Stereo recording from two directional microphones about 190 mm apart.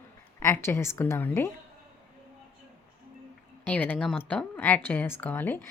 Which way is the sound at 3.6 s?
10° left (ahead or behind).